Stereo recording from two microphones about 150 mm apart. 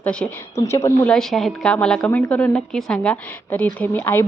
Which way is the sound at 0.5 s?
20° left (ahead or behind).